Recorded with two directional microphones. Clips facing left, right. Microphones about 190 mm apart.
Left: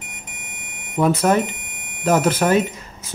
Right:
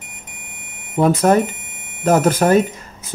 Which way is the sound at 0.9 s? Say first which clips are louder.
Right 3 dB; 45° right (ahead or behind).